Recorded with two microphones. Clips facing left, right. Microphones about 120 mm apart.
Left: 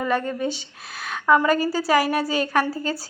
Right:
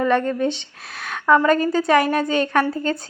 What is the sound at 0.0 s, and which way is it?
Speech, 10° left (ahead or behind).